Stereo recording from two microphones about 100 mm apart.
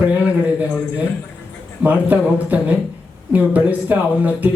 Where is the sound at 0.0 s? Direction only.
15° right (ahead or behind).